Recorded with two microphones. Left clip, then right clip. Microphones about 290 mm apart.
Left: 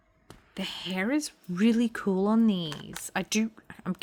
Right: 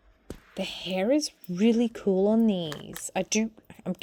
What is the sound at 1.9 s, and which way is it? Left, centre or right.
Speech, centre.